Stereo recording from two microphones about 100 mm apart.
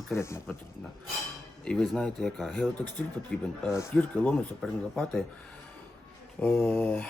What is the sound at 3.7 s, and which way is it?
Speech, 25° left (ahead or behind).